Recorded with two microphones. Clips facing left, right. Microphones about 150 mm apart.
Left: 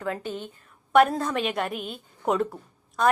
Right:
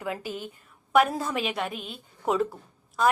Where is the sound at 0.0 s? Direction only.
10° right (ahead or behind).